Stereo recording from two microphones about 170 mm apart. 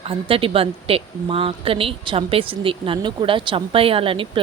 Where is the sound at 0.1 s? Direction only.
35° right (ahead or behind).